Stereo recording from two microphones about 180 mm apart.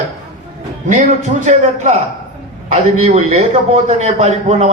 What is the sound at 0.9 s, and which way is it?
A man's voice, 40° right (ahead or behind).